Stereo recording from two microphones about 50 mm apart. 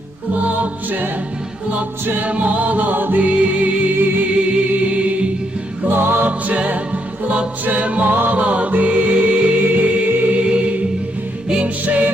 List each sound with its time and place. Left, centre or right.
0.4 s music: right
2.0 s choir: right
3.2 s music: right
3.9 s choir: right
4.7 s music: right
5.9 s music: right
6.4 s music: right
8.4 s music: right
10.4 s music: right
11.9 s music: right